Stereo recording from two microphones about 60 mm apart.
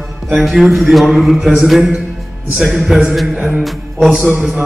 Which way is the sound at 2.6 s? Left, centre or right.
Centre.